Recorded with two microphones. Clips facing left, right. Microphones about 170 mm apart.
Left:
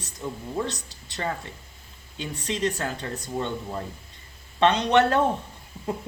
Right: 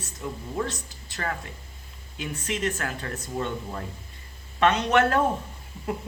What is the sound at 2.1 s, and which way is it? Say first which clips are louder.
Speech: even; 35° left (ahead or behind).